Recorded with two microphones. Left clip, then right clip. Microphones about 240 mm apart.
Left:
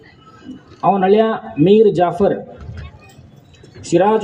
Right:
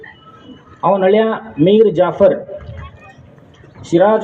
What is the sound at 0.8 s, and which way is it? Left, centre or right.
Speech, left.